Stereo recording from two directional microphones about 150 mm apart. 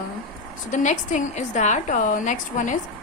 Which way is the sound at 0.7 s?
55° left (ahead or behind).